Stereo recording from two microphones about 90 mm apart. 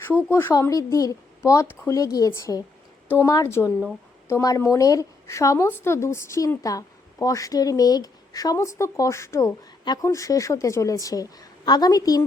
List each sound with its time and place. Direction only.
0.3 s a woman's voice: 25° left (ahead or behind)
2.0 s a woman's voice: 40° left (ahead or behind)